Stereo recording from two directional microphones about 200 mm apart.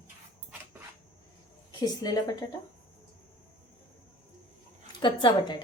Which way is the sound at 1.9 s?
20° left (ahead or behind).